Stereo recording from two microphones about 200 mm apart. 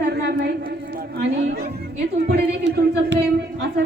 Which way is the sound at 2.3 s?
60° right (ahead or behind).